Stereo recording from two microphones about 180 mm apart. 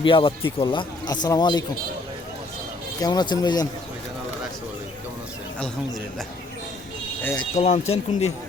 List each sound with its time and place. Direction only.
0.0 s speech: 30° left (ahead or behind)
3.0 s speech: 25° left (ahead or behind)
7.5 s speech: 35° left (ahead or behind)